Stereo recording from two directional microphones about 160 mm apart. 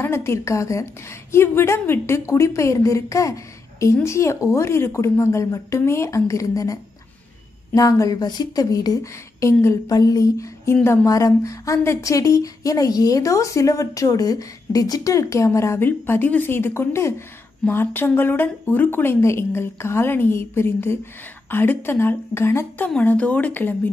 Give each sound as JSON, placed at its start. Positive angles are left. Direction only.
{"t": 0.0, "sound": "speech", "side_deg": 15}